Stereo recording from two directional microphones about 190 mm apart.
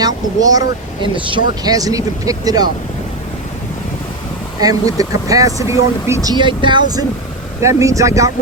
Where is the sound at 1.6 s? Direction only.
20° right (ahead or behind).